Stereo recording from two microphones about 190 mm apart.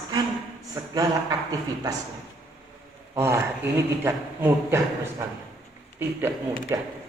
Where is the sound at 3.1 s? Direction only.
15° right (ahead or behind).